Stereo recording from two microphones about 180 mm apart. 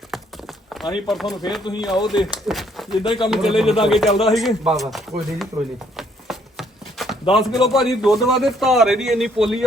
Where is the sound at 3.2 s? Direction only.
Centre (ahead or behind).